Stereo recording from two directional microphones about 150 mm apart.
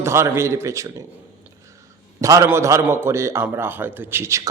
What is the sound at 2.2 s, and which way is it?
A man's voice, 20° right (ahead or behind).